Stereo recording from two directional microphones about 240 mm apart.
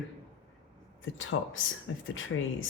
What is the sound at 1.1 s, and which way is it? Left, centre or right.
Speech, left.